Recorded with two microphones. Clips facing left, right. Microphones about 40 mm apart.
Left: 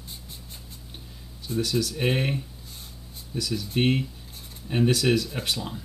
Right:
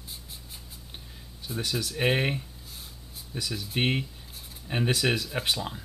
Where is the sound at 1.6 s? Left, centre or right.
Centre.